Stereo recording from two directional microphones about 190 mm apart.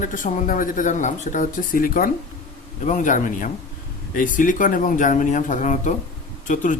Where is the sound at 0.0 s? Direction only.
45° left (ahead or behind).